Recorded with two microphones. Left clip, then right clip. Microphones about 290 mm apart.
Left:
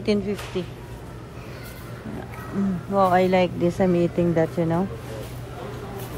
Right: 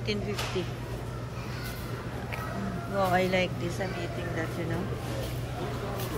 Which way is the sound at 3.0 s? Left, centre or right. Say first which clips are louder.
Left 8 dB; centre.